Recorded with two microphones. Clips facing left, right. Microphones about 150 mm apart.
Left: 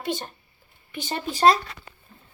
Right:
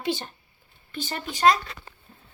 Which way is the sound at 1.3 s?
30° left (ahead or behind).